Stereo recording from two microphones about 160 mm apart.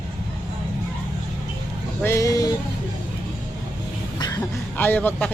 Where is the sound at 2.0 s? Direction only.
20° left (ahead or behind).